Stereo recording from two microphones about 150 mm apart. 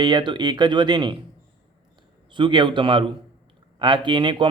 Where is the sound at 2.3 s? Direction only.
30° right (ahead or behind).